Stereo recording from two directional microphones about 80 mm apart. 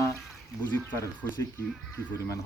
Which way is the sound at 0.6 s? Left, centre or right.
Left.